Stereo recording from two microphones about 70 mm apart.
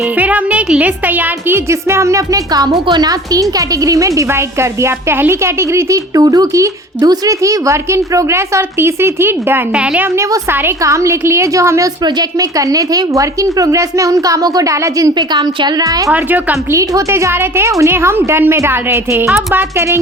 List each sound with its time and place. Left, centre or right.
0.2 s a woman's voice: right
3.8 s a woman's voice: right
4.3 s a woman's voice: right
6.1 s a woman's voice: right
9.7 s a woman's voice: centre
10.8 s a woman's voice: right
15.3 s a woman's voice: right
16.1 s a woman's voice: right
16.7 s a woman's voice: right